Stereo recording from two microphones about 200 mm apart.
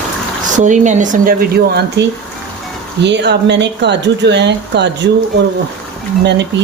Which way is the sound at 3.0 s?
60° right (ahead or behind).